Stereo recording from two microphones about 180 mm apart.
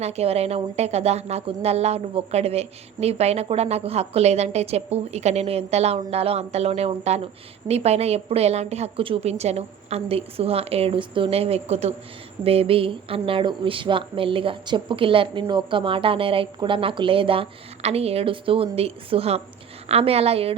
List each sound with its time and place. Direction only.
0.0 s a woman's voice: 35° right (ahead or behind)